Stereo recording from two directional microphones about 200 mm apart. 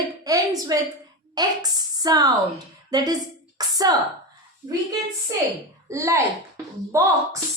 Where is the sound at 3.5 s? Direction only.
20° right (ahead or behind).